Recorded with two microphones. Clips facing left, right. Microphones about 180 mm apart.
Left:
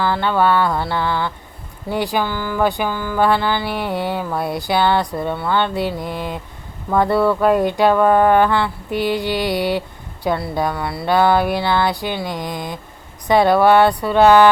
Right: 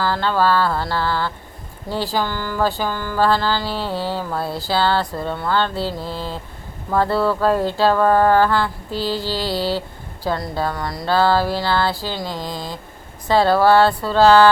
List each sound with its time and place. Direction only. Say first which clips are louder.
0.0 s speech: left 2 dB; 15° left (ahead or behind)
12.2 s a sound: left 2 dB; 20° left (ahead or behind)
13.2 s speech: left 2 dB; 15° left (ahead or behind)